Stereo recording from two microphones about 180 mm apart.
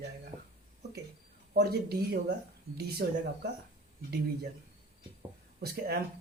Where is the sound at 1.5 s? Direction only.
65° right (ahead or behind).